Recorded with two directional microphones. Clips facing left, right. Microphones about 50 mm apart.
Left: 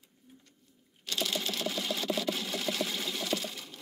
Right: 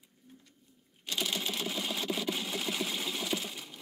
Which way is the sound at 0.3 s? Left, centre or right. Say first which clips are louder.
Right 1 dB; centre.